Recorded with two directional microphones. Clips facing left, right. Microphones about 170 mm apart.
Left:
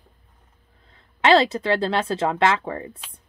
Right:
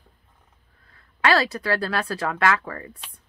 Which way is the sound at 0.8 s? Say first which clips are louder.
Left 4 dB; 25° left (ahead or behind).